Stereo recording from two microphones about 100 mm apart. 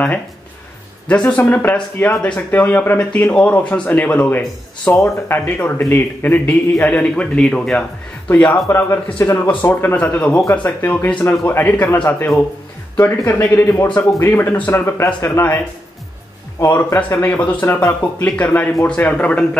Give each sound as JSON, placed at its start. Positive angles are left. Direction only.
{"t": 1.0, "sound": "a man's voice", "side_deg": 15}